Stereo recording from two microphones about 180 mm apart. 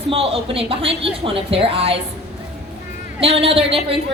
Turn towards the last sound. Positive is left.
turn(degrees=-30)  # may be behind; listen again after turning